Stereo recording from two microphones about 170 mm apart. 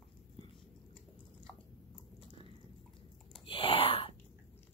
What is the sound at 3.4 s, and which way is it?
Wail, 30° left (ahead or behind).